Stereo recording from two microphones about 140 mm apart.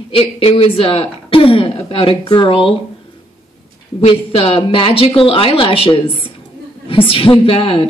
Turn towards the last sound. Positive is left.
turn(degrees=40)  # may be behind; listen again after turning